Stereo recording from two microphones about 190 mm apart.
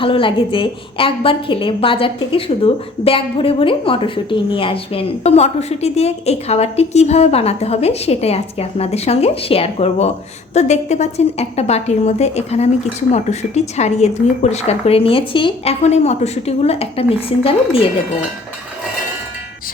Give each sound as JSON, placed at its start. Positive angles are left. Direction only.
{"t": 0.0, "sound": "a woman's voice", "side_deg": 25}